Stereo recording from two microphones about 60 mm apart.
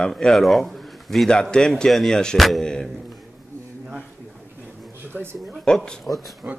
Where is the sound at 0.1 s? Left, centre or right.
Centre.